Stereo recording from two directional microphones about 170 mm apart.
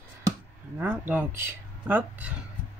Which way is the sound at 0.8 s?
10° right (ahead or behind).